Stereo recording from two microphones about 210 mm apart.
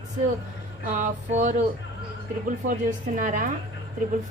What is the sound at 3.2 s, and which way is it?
Speech, 40° right (ahead or behind).